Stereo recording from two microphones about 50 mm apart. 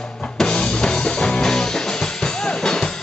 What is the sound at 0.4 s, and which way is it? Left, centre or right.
Music, centre.